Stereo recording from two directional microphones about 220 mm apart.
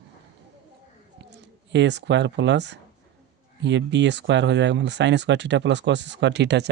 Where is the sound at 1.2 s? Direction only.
50° right (ahead or behind).